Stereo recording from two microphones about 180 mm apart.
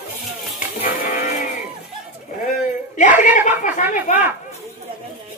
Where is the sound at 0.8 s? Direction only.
50° left (ahead or behind).